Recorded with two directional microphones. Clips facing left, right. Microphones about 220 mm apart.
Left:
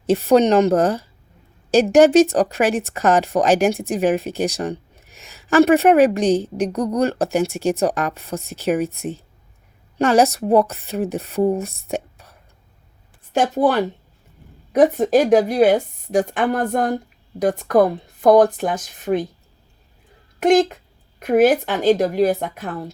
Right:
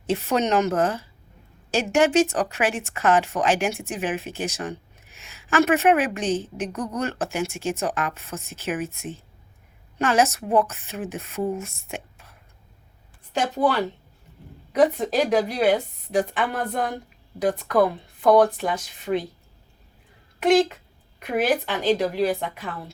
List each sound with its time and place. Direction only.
0.1 s a woman's voice: 35° left (ahead or behind)
10.0 s a woman's voice: 35° left (ahead or behind)
13.3 s a woman's voice: 50° left (ahead or behind)
20.4 s a woman's voice: 45° left (ahead or behind)